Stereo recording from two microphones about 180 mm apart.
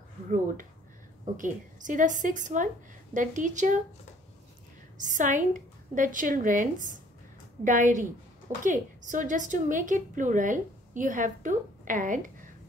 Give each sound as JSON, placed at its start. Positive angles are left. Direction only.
{"t": 1.2, "sound": "a woman's voice", "side_deg": -45}
{"t": 4.9, "sound": "a woman's voice", "side_deg": -45}